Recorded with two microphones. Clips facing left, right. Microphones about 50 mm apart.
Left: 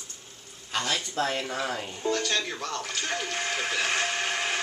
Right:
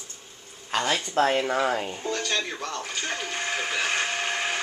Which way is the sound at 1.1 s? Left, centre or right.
Right.